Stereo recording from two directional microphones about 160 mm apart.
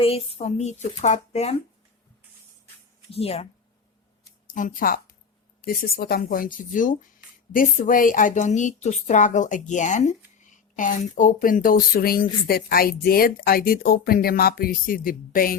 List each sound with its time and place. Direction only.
0.0 s a woman's voice: 35° left (ahead or behind)
3.1 s speech: 40° left (ahead or behind)
4.4 s a woman's voice: 55° left (ahead or behind)